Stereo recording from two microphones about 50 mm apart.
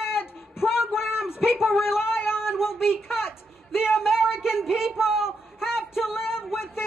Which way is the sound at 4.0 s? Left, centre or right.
Centre.